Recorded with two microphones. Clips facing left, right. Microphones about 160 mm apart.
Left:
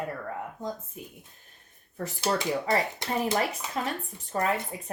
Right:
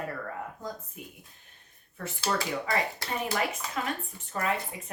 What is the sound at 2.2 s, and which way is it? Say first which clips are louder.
Speech: left 3 dB; 20° left (ahead or behind).